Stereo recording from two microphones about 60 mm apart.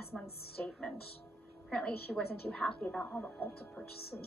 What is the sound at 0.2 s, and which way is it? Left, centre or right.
A woman's voice, centre.